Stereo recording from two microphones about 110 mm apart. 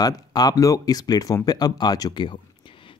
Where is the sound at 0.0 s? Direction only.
35° left (ahead or behind).